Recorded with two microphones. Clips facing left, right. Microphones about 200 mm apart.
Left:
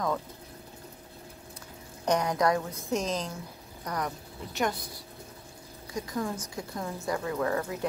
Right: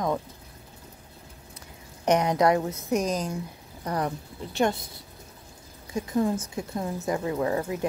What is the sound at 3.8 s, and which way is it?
Speech, 30° right (ahead or behind).